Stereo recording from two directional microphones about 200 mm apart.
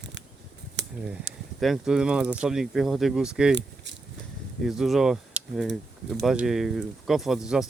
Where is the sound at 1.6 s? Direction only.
Centre (ahead or behind).